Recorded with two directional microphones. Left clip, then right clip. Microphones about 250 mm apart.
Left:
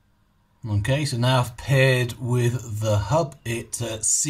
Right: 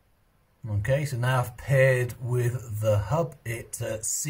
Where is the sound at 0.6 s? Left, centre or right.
Centre.